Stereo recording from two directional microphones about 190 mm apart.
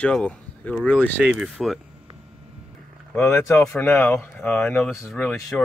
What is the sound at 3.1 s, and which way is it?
Speech, 10° left (ahead or behind).